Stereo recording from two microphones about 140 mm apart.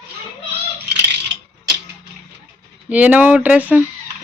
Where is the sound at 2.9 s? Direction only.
10° right (ahead or behind).